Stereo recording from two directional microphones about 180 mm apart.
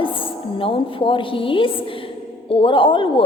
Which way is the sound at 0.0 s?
30° left (ahead or behind).